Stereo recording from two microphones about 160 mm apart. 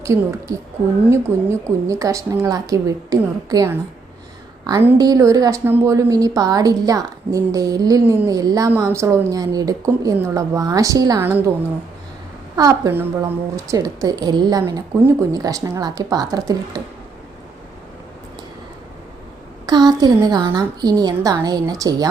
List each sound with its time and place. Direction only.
0.0 s a woman's voice: 15° right (ahead or behind)
4.9 s a woman's voice: 20° right (ahead or behind)
12.5 s a woman's voice: 20° right (ahead or behind)
19.6 s a woman's voice: 25° right (ahead or behind)